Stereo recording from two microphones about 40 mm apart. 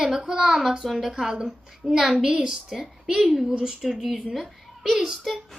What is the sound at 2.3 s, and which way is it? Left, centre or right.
Speech, centre.